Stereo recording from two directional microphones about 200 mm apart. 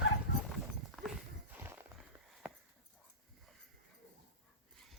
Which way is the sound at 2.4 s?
5° right (ahead or behind).